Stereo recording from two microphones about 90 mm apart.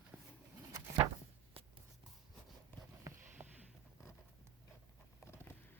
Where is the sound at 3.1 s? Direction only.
25° right (ahead or behind).